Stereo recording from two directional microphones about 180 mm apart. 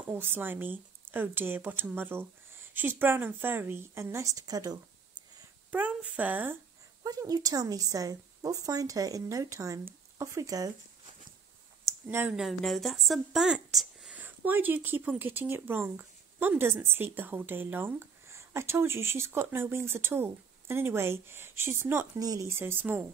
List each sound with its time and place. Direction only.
0.1 s speech: 10° right (ahead or behind)
5.7 s speech: 10° right (ahead or behind)
7.0 s a woman's voice: 20° right (ahead or behind)
12.1 s speech: 15° right (ahead or behind)
12.4 s speech: centre (ahead or behind)